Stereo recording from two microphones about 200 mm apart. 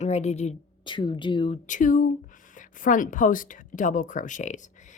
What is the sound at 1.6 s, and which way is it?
Speech, 40° left (ahead or behind).